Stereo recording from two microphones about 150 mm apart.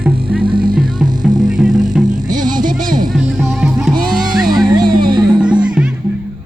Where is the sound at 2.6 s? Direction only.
65° right (ahead or behind).